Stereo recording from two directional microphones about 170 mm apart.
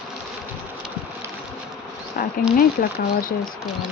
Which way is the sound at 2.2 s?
55° left (ahead or behind).